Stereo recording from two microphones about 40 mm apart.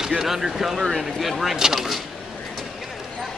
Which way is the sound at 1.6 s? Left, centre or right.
Centre.